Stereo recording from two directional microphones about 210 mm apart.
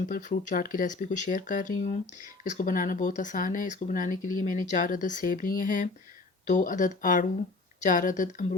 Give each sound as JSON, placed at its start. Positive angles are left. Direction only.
{"t": 0.1, "sound": "speech", "side_deg": 40}